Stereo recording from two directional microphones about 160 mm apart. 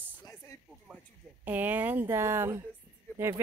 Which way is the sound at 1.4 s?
10° right (ahead or behind).